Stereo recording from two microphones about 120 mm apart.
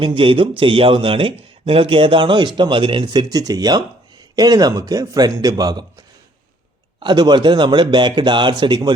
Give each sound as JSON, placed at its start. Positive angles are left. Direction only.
{"t": 0.0, "sound": "a man's voice", "side_deg": -45}